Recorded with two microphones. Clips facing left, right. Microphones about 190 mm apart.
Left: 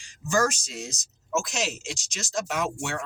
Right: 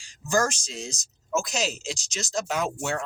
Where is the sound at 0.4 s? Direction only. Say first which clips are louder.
Left 2 dB; 5° left (ahead or behind).